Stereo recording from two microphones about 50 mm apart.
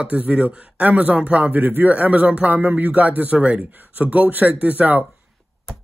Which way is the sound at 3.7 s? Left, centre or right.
Right.